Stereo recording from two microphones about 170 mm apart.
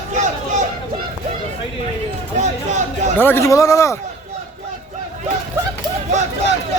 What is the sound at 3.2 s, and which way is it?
Speech, 15° left (ahead or behind).